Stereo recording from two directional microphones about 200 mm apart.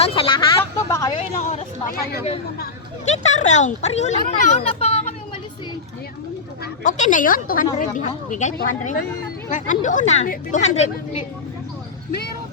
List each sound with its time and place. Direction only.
0.0 s speech: 25° left (ahead or behind)
0.6 s vehicle: 15° left (ahead or behind)
1.4 s a sound: 35° left (ahead or behind)
3.1 s speech: 35° left (ahead or behind)
6.8 s a woman's voice: 40° left (ahead or behind)